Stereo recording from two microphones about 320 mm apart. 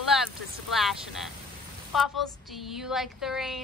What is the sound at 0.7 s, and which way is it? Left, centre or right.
Speech, centre.